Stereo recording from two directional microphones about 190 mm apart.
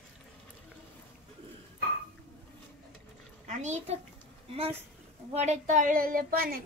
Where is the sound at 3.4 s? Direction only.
40° right (ahead or behind).